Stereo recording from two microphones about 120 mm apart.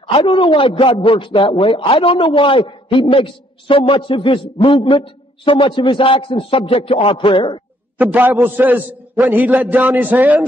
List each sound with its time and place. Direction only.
0.0 s a man's voice: 40° left (ahead or behind)
8.0 s a man's voice: 15° right (ahead or behind)